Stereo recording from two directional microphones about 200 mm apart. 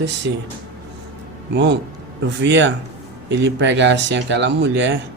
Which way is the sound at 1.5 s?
60° right (ahead or behind).